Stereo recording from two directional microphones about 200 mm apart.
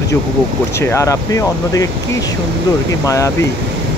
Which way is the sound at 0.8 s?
15° left (ahead or behind).